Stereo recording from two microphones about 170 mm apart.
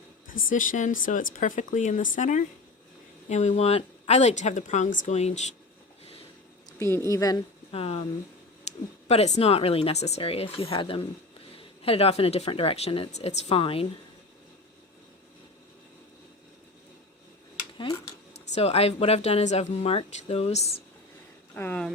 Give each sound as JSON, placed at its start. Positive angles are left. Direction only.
{"t": 0.3, "sound": "speech", "side_deg": 50}
{"t": 6.7, "sound": "a sound", "side_deg": 15}
{"t": 7.1, "sound": "speech", "side_deg": 20}
{"t": 7.7, "sound": "speech", "side_deg": 35}
{"t": 18.5, "sound": "speech", "side_deg": 35}
{"t": 21.5, "sound": "speech", "side_deg": 10}